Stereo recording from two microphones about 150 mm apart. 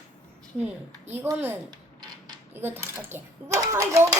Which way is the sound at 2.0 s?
25° right (ahead or behind).